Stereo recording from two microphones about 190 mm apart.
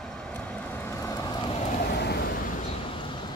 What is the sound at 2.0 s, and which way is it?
Vehicle, 60° left (ahead or behind).